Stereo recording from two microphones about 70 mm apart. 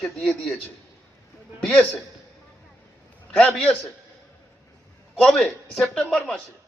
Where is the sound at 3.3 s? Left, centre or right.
Centre.